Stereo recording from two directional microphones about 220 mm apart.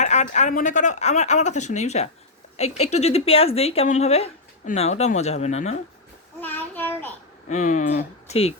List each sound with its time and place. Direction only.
0.0 s speech: 30° left (ahead or behind)
6.4 s child singing: 10° left (ahead or behind)
7.4 s speech: 35° left (ahead or behind)